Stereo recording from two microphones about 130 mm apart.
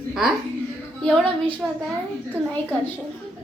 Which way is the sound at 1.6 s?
5° right (ahead or behind).